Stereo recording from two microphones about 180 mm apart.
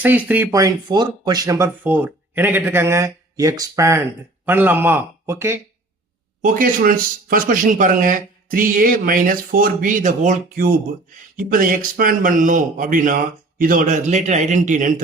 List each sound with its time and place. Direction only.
0.0 s speech: 10° right (ahead or behind)
0.5 s speech: 20° right (ahead or behind)
6.4 s speech: 50° right (ahead or behind)